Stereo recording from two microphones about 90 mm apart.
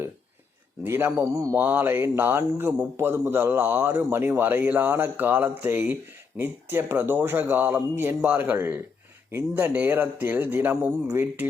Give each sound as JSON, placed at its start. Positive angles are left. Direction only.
{"t": 0.9, "sound": "speech", "side_deg": -30}
{"t": 1.5, "sound": "a man's voice", "side_deg": -20}